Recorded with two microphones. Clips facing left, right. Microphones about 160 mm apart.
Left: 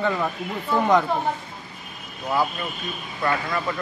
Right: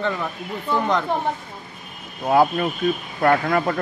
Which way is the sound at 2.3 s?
55° right (ahead or behind).